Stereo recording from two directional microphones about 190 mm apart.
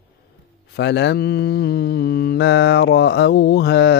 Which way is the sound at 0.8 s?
70° left (ahead or behind).